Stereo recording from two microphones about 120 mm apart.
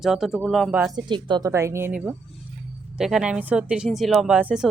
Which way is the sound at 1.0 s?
40° right (ahead or behind).